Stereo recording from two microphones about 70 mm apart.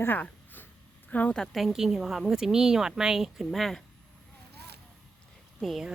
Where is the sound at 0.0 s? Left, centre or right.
Left.